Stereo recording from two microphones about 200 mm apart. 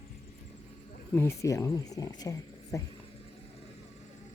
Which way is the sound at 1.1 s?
15° left (ahead or behind).